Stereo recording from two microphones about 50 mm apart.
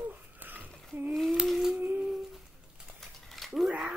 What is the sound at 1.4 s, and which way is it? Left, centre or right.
Humming, centre.